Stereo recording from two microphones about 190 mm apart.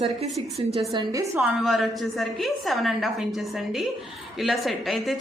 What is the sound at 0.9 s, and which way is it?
Speech, 15° right (ahead or behind).